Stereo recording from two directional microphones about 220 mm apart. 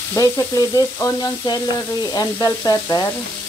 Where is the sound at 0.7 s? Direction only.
15° left (ahead or behind).